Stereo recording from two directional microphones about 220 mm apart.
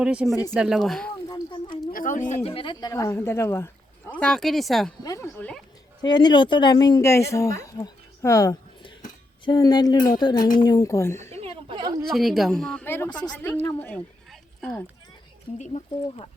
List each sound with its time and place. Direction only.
0.0 s a woman's voice: 5° right (ahead or behind)
1.3 s a sound: 20° left (ahead or behind)
1.9 s speech: 40° left (ahead or behind); by 4.9 s centre (ahead or behind)
5.0 s speech: 15° left (ahead or behind)
11.2 s a sound: 30° right (ahead or behind)
12.1 s a woman's voice: centre (ahead or behind)
15.5 s speech: 30° left (ahead or behind)